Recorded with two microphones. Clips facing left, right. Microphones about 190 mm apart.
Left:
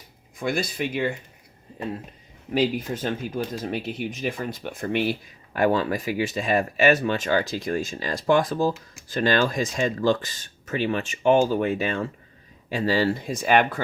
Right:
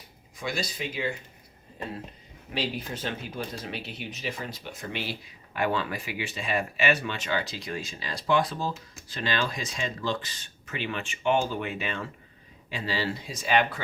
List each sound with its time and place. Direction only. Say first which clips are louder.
0.3 s speech: left 6 dB; 50° left (ahead or behind)
2.6 s speech: left 8 dB; 45° left (ahead or behind)